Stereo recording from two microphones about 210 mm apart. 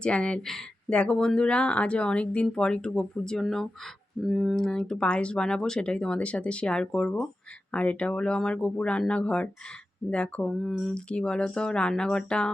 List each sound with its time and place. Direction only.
0.0 s speech: 5° left (ahead or behind)